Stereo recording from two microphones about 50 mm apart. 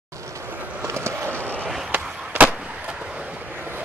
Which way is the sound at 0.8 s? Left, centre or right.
Right.